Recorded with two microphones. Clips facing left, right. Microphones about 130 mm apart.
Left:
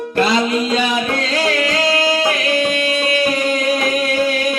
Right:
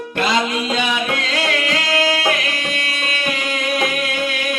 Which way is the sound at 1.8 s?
30° left (ahead or behind).